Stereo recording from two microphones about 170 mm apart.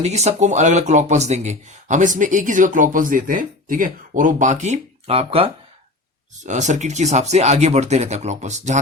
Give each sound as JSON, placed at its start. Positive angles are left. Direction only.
{"t": 0.0, "sound": "speech", "side_deg": -40}
{"t": 6.4, "sound": "speech", "side_deg": -45}